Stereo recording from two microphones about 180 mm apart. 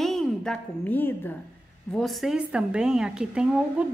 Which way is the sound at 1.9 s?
Centre (ahead or behind).